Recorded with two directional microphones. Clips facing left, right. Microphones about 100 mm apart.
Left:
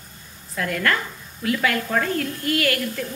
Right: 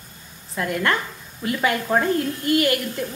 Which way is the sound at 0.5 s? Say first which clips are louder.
Right 1 dB; 20° right (ahead or behind).